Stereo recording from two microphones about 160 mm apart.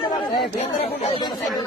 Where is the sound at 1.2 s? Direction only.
25° left (ahead or behind).